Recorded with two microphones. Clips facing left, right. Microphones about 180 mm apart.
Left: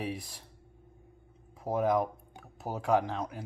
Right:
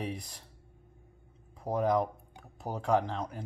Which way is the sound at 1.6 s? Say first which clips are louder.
Even; 5° left (ahead or behind).